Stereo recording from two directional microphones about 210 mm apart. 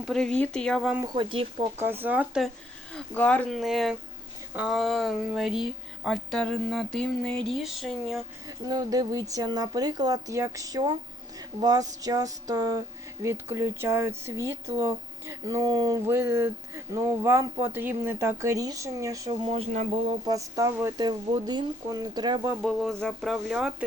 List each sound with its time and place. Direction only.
0.0 s speech: centre (ahead or behind)
1.0 s speech: 20° right (ahead or behind)
1.8 s speech: 10° right (ahead or behind)
2.9 s speech: 5° left (ahead or behind)
8.4 s speech: 20° right (ahead or behind)
19.5 s a sound: 30° right (ahead or behind)
20.1 s speech: 15° right (ahead or behind)
22.6 s speech: centre (ahead or behind)